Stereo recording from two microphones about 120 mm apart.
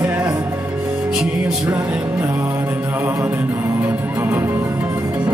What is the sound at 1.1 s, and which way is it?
Music, 10° right (ahead or behind).